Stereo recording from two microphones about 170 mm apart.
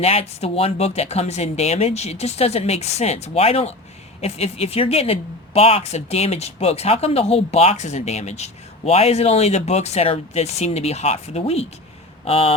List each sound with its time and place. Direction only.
0.0 s speech: 35° left (ahead or behind)